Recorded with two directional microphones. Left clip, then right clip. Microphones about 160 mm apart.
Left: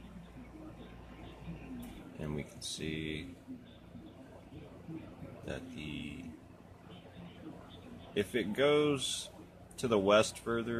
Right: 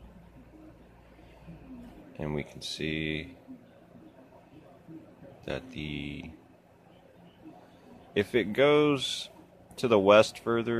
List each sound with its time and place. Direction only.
2.1 s a man's voice: 55° right (ahead or behind)
5.4 s a man's voice: 55° right (ahead or behind)
8.1 s a man's voice: 55° right (ahead or behind)